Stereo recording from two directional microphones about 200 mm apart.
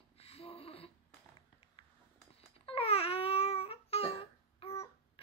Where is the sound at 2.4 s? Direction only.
30° left (ahead or behind).